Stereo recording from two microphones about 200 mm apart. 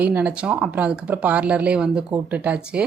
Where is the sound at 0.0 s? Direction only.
10° right (ahead or behind).